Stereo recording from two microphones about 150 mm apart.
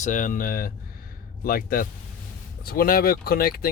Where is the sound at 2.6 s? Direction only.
85° left.